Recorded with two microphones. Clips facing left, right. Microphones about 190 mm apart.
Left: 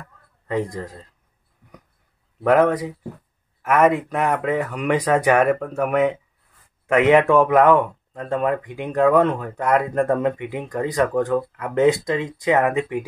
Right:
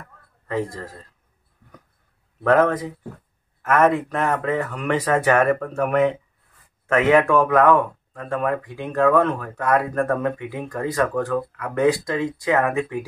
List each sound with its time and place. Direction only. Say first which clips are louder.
0.5 s speech: left 2 dB; 15° left (ahead or behind)
2.4 s speech: left 1 dB; 10° left (ahead or behind)
6.9 s speech: left 2 dB; 20° left (ahead or behind)